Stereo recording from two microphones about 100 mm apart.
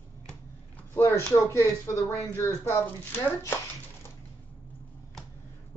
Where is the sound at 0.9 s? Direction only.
25° left (ahead or behind).